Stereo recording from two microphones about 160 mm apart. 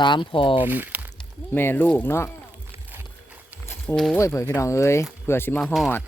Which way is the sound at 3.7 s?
5° left (ahead or behind).